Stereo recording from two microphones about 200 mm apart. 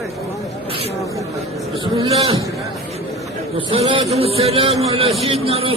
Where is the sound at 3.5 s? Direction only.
25° right (ahead or behind).